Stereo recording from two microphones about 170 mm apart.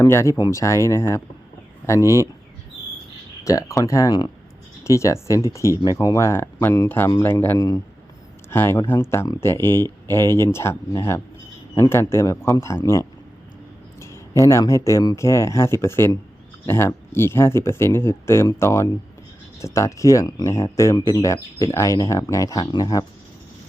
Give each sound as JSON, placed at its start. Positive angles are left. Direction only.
{"t": 0.0, "sound": "speech", "side_deg": 15}
{"t": 3.4, "sound": "speech", "side_deg": 20}